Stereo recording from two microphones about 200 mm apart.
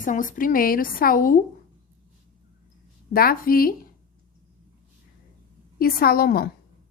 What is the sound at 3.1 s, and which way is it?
Speech, 45° left (ahead or behind).